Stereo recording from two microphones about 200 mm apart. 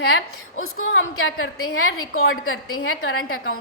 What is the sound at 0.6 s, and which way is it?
A woman's voice, 80° left.